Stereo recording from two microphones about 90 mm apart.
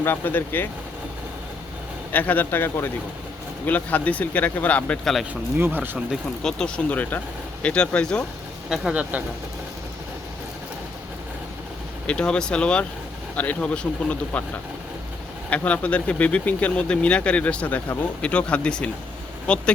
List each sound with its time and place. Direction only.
0.0 s speech: 25° left (ahead or behind)
2.1 s speech: 20° left (ahead or behind)
5.3 s speech: 20° right (ahead or behind)
6.4 s speech: 10° left (ahead or behind)
6.9 s speech: 20° left (ahead or behind)
8.7 s speech: 10° right (ahead or behind)
12.0 s speech: 10° left (ahead or behind)
15.4 s speech: 15° left (ahead or behind)